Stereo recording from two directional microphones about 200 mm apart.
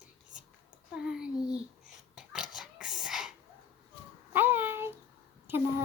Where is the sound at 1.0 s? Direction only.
5° right (ahead or behind).